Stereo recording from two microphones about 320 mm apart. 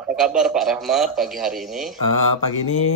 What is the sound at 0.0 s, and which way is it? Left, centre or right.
A man's voice, centre.